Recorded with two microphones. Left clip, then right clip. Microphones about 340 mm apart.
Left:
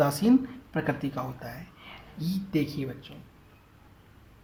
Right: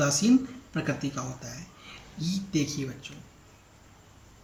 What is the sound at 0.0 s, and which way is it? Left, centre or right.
Speech, centre.